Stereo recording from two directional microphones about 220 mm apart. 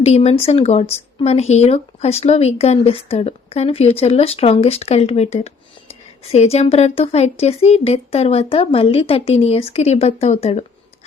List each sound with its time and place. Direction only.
0.0 s speech: 30° left (ahead or behind)